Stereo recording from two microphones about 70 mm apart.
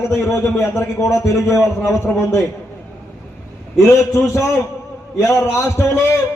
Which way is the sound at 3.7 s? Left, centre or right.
Left.